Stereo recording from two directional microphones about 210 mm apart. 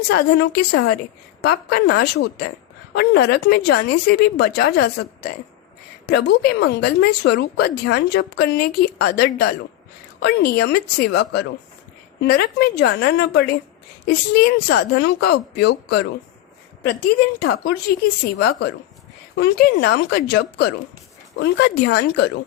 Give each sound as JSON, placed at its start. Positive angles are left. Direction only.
{"t": 0.1, "sound": "a woman's voice", "side_deg": 55}
{"t": 17.4, "sound": "a woman's voice", "side_deg": 50}